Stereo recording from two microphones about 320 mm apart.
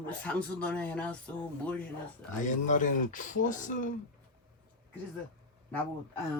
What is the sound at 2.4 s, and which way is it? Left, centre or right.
Speech, left.